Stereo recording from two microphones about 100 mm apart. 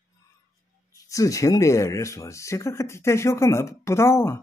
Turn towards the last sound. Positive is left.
turn(degrees=25)  # may be behind; listen again after turning